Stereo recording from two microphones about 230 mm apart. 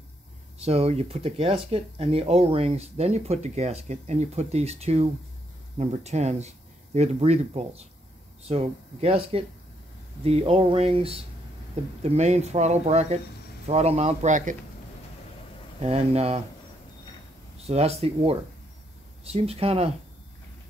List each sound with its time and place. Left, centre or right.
0.6 s speech: right
15.8 s speech: right
17.6 s speech: right